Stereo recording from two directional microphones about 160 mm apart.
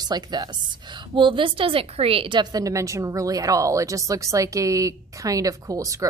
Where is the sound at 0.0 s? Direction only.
25° right (ahead or behind).